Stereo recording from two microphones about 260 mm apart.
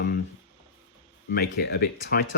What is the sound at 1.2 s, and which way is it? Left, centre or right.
Speech, left.